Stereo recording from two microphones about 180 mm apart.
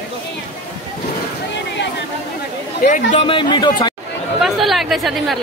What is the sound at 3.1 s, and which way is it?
Speech, 30° left (ahead or behind).